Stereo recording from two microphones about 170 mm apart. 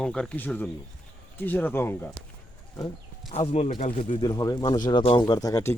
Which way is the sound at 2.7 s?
25° left (ahead or behind).